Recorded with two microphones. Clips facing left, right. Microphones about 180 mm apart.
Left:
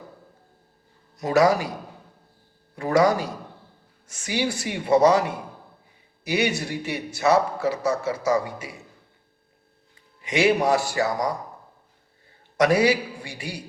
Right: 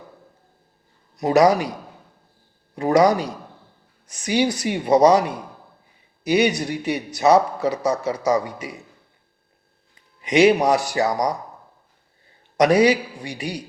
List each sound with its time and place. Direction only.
1.2 s a man's voice: 20° right (ahead or behind)
2.9 s a man's voice: 20° right (ahead or behind)
6.2 s a man's voice: 20° right (ahead or behind)
10.2 s a man's voice: 20° right (ahead or behind)
12.5 s a man's voice: 20° right (ahead or behind)